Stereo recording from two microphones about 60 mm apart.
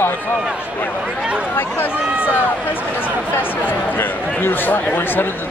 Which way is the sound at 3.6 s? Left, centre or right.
Left.